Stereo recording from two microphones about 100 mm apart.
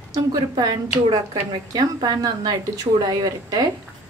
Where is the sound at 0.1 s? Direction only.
40° right (ahead or behind).